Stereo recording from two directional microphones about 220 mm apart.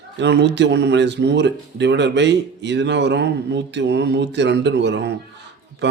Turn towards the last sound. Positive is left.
turn(degrees=-55)  # may be behind; listen again after turning